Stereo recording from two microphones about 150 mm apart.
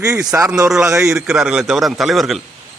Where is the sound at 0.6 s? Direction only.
5° right (ahead or behind).